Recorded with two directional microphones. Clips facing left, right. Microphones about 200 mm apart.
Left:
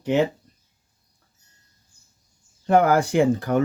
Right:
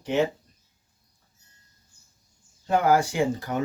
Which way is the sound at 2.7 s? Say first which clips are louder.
Left 4 dB; 55° left (ahead or behind).